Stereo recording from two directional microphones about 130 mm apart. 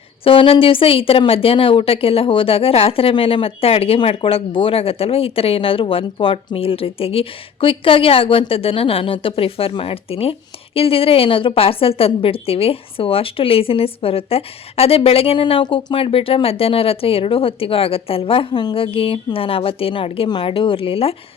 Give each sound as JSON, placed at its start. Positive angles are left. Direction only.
{"t": 0.3, "sound": "a woman's voice", "side_deg": 45}